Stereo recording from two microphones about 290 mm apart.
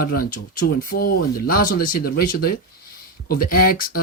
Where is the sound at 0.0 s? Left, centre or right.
Left.